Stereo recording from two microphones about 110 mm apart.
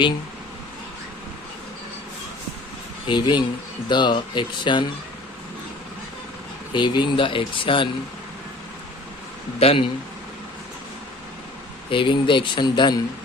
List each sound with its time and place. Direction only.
3.1 s speech: 45° left (ahead or behind)
6.7 s speech: 45° left (ahead or behind)
9.6 s a man's voice: 60° left (ahead or behind)
11.9 s speech: 50° left (ahead or behind)